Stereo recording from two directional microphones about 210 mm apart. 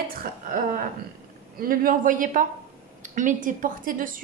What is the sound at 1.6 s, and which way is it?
A woman's voice, 40° right (ahead or behind).